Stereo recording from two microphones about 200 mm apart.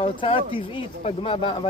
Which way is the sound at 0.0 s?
25° left (ahead or behind).